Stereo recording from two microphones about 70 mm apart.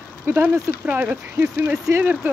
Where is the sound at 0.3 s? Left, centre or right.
Right.